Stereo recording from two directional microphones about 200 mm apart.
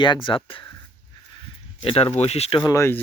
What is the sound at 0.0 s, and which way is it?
Speech, 25° left (ahead or behind).